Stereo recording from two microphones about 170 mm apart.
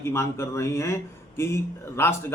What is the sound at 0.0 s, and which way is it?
A man's voice, 15° left (ahead or behind).